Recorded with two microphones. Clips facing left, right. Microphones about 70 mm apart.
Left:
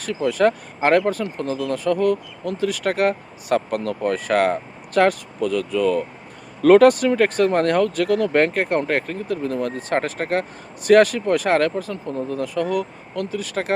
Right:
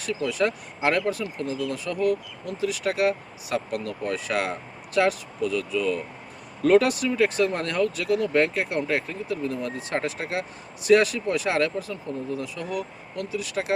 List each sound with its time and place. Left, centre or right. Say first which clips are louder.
0.0 s speech: left 6 dB; left